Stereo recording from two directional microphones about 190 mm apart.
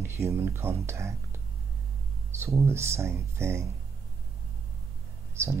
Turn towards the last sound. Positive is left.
turn(degrees=-15)  # may be behind; listen again after turning